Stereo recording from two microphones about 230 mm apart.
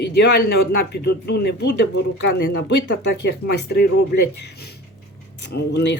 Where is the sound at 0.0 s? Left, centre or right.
Left.